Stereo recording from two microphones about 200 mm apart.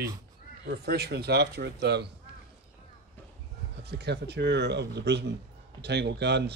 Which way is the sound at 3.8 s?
55° right (ahead or behind).